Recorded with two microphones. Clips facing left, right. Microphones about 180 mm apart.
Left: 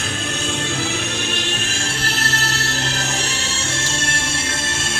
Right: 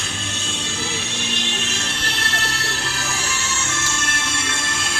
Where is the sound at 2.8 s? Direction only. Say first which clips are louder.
Left 4 dB; 40° left (ahead or behind).